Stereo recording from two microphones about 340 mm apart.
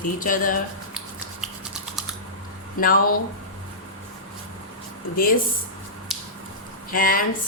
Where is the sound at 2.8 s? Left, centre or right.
Left.